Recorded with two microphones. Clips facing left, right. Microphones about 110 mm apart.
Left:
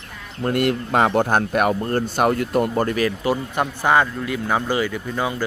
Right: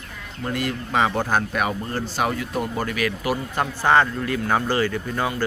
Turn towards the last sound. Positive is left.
turn(degrees=10)  # may be behind; listen again after turning